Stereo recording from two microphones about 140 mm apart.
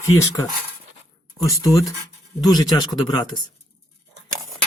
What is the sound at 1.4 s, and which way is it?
Speech, 25° left (ahead or behind).